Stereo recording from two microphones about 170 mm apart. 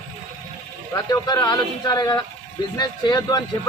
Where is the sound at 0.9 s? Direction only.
25° left (ahead or behind).